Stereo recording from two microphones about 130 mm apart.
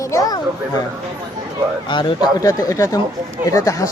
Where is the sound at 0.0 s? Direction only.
25° left (ahead or behind).